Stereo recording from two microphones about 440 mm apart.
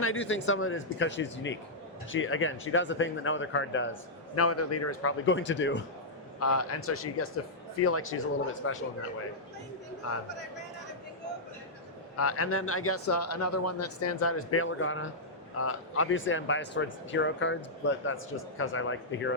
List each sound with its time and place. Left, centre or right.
0.0 s speech: left
12.1 s a man's voice: left